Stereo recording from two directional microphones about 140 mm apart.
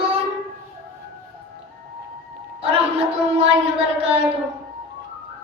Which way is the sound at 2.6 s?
45° right (ahead or behind).